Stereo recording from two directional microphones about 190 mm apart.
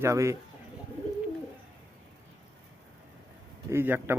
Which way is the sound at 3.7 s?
10° right (ahead or behind).